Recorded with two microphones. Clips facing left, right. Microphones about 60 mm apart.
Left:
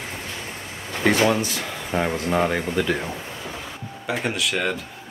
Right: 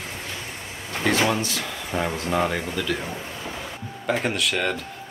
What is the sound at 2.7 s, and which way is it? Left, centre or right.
Speech, left.